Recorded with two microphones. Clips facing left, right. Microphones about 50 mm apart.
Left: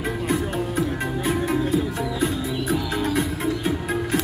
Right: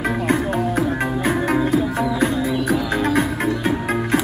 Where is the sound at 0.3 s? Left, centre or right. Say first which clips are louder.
Right 5 dB; right.